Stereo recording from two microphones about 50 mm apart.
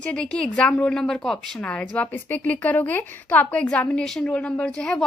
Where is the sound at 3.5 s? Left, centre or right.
Left.